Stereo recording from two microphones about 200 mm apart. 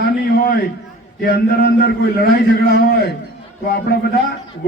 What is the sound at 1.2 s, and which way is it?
A man's voice, 50° left (ahead or behind).